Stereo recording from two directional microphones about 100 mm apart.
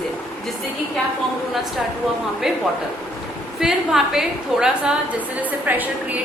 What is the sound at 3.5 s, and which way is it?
A woman's voice, 5° right (ahead or behind).